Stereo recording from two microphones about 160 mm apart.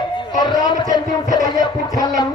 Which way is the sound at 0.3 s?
25° left (ahead or behind).